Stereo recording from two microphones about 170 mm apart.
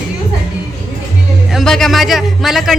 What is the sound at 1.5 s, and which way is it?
Speech, centre (ahead or behind).